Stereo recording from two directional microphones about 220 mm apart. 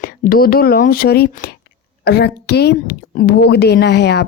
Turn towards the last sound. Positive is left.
turn(degrees=50)  # may be behind; listen again after turning